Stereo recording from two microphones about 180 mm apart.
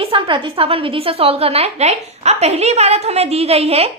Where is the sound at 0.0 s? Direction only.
30° right (ahead or behind).